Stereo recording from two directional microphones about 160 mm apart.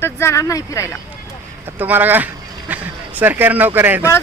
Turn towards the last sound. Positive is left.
turn(degrees=-10)  # may be behind; listen again after turning